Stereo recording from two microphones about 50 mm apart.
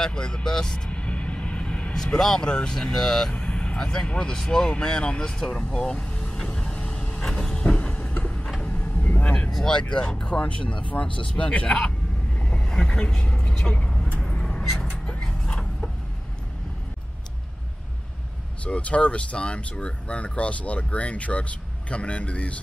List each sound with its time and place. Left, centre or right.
0.0 s speech: centre
0.8 s vehicle: left
2.1 s speech: centre
3.4 s speech: left
5.7 s vehicle: centre
9.5 s speech: centre
12.4 s vehicle: left
12.6 s speech: centre
14.2 s vehicle: centre
14.6 s a sound: centre
18.6 s speech: left